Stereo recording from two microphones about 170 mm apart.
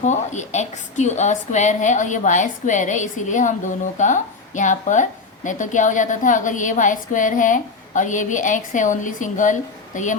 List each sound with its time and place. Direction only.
0.0 s a woman's voice: 45° left (ahead or behind)